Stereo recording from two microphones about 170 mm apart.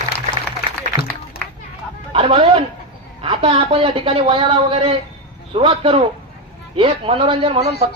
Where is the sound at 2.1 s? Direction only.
35° right (ahead or behind).